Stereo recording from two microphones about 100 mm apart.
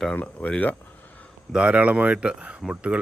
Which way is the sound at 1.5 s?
10° right (ahead or behind).